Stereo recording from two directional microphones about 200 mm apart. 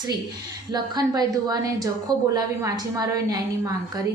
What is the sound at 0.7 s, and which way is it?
A woman's voice, 20° right (ahead or behind).